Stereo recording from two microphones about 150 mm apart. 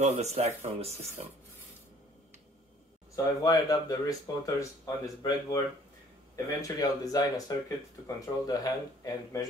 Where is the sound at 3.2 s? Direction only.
25° left (ahead or behind).